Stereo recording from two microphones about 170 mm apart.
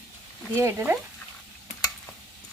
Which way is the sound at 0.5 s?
15° right (ahead or behind).